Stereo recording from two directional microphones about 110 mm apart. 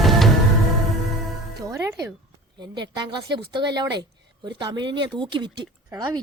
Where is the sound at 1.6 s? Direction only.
35° right (ahead or behind).